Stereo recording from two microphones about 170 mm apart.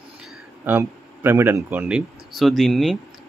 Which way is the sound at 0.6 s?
10° right (ahead or behind).